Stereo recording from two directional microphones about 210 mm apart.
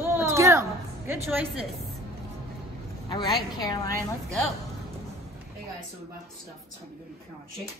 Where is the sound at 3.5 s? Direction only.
20° left (ahead or behind).